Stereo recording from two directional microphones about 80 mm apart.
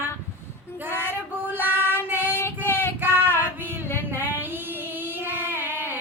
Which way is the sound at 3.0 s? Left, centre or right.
Right.